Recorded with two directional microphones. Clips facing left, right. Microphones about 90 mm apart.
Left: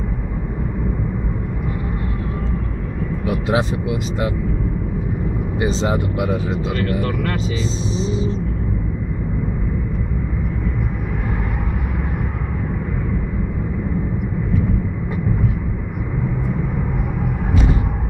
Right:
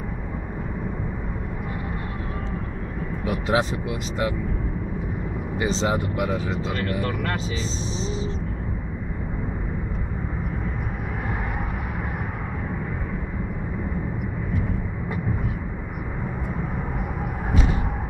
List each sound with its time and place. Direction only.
3.3 s speech: centre (ahead or behind)
5.6 s speech: 5° left (ahead or behind)
6.8 s speech: 25° right (ahead or behind)
7.9 s music: 5° left (ahead or behind)